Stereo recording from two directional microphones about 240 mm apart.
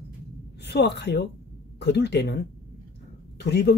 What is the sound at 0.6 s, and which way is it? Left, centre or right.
A woman's voice, left.